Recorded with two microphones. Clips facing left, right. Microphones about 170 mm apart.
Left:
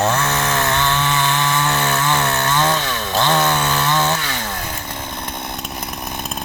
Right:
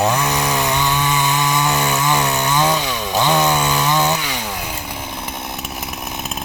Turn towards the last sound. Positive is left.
turn(degrees=-10)  # may be behind; listen again after turning